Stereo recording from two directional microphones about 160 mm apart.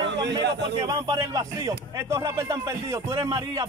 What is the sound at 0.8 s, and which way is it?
A man's voice, 20° right (ahead or behind).